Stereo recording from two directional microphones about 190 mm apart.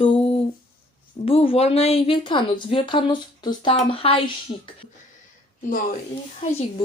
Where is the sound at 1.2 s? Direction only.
30° left (ahead or behind).